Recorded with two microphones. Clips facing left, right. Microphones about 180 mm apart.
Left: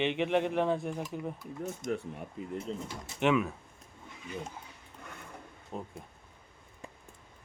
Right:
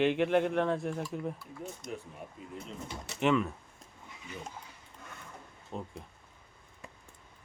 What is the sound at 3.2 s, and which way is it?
Speech, 5° left (ahead or behind).